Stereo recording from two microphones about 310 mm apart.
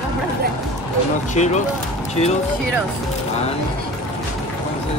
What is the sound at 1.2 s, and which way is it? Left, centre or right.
Speech, left.